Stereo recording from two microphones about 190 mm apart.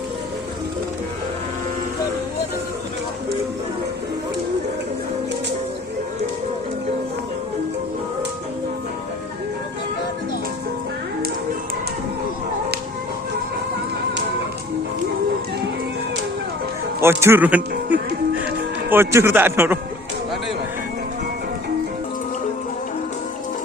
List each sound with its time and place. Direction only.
17.0 s a man's voice: 15° right (ahead or behind)
17.8 s speech: 65° right (ahead or behind)
18.9 s a man's voice: 10° right (ahead or behind)